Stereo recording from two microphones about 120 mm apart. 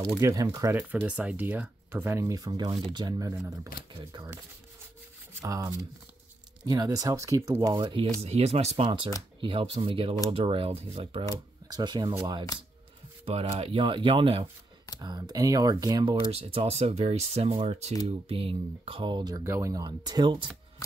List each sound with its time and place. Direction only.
0.2 s speech: 30° right (ahead or behind)
0.7 s speech: 10° right (ahead or behind); by 4.3 s 35° right (ahead or behind)
5.4 s speech: 30° right (ahead or behind)
7.7 s speech: 45° right (ahead or behind)
8.2 s speech: 60° right (ahead or behind)
8.8 s speech: 45° right (ahead or behind)
11.3 s speech: 30° right (ahead or behind)
13.2 s speech: 55° right (ahead or behind)
15.0 s speech: 35° right (ahead or behind)
16.3 s speech: 55° right (ahead or behind); by 19.4 s 35° right (ahead or behind)
19.4 s speech: 20° right (ahead or behind)
19.7 s speech: 35° right (ahead or behind)